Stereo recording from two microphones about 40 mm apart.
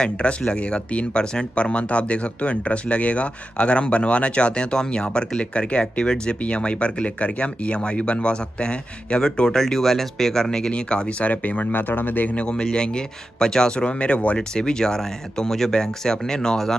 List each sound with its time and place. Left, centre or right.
0.0 s speech: left
9.5 s speech: centre
11.2 s speech: left
11.7 s speech: left
12.4 s speech: left
13.8 s speech: left
14.5 s speech: centre